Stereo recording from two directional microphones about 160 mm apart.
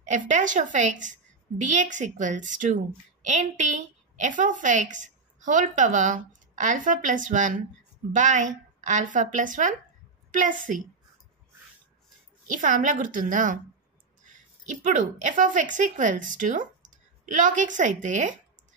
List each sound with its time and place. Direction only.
0.0 s a woman's voice: 50° right (ahead or behind)
12.4 s a woman's voice: 55° right (ahead or behind)